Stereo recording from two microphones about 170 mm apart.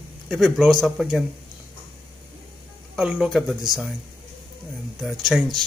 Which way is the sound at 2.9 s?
5° right (ahead or behind).